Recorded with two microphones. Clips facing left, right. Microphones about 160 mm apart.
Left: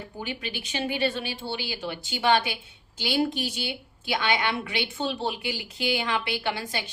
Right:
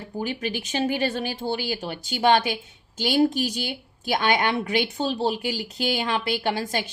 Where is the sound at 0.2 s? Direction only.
40° right (ahead or behind).